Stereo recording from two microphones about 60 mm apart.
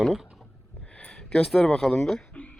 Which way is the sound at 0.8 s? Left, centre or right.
Centre.